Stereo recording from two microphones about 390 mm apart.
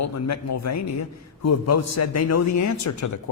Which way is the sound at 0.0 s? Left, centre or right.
Left.